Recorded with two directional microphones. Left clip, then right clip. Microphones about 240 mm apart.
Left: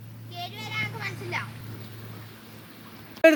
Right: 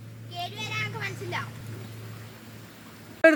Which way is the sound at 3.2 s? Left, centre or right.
Centre.